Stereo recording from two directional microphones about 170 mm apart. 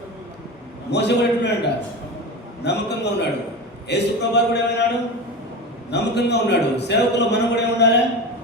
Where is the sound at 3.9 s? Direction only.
85° left.